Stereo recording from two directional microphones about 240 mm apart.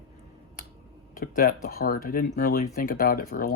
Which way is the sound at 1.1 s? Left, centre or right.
Left.